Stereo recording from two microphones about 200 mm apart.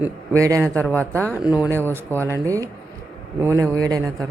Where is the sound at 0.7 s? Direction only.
10° left (ahead or behind).